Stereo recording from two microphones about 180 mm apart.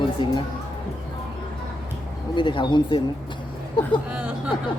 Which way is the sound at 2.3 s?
25° left (ahead or behind).